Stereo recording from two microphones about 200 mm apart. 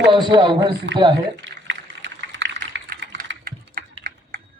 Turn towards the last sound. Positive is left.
turn(degrees=-50)  # may be behind; listen again after turning